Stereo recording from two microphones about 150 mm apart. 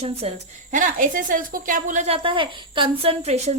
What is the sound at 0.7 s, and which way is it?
A woman's voice, 60° right (ahead or behind).